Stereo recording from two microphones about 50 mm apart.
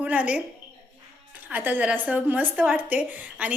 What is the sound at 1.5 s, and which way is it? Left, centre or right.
Speech, right.